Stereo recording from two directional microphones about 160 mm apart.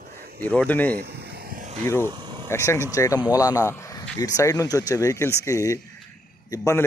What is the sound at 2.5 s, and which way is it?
Speech, 15° left (ahead or behind).